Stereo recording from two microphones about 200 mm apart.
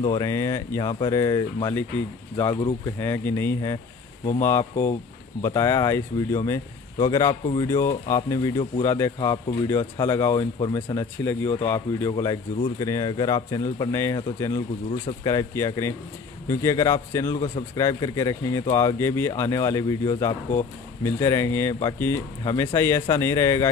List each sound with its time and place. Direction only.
0.1 s speech: 15° left (ahead or behind)